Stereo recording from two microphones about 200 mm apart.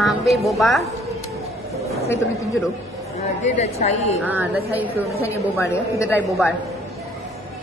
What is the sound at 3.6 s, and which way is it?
Speech, 35° left (ahead or behind).